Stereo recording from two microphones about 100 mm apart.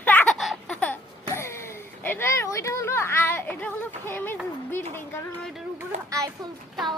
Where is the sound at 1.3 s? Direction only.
25° left (ahead or behind).